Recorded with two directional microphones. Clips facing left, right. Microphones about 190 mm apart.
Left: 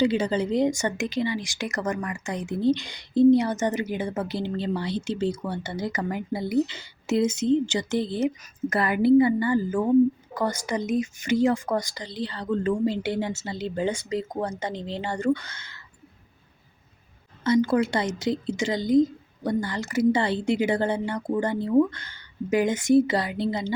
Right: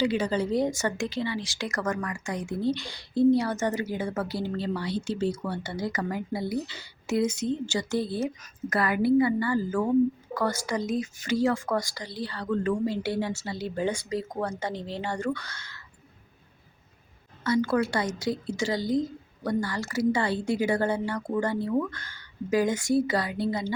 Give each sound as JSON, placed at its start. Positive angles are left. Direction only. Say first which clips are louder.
{"t": 0.0, "sound": "a woman's voice", "louder": "left 3 dB", "side_deg": 25}
{"t": 17.4, "sound": "a woman's voice", "louder": "left 3 dB", "side_deg": 20}